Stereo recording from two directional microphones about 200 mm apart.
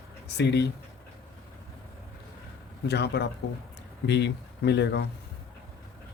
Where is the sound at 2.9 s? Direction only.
55° left (ahead or behind).